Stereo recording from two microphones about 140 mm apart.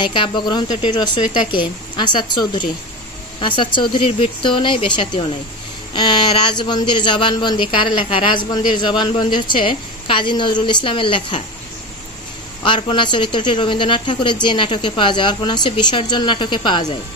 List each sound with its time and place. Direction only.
0.0 s speech: 35° left (ahead or behind)
12.6 s speech: 35° left (ahead or behind)